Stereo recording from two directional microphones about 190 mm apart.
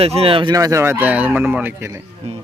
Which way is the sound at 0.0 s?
30° right (ahead or behind).